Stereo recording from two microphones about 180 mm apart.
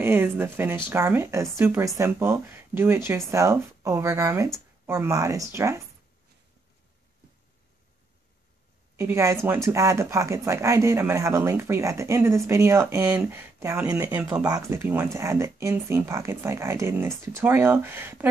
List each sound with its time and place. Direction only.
0.0 s speech: 10° right (ahead or behind)
8.9 s speech: 15° right (ahead or behind)